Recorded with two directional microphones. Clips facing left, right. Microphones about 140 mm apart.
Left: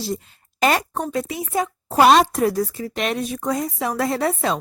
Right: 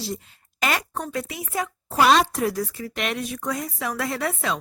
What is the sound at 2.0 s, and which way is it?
Speech, 45° left (ahead or behind).